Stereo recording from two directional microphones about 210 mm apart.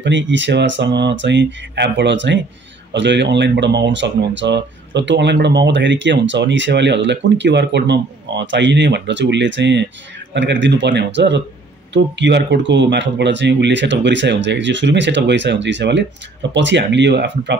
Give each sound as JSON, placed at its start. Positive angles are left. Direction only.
{"t": 0.0, "sound": "speech", "side_deg": -60}